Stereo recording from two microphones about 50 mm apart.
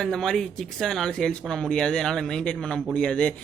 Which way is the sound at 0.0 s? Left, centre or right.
Centre.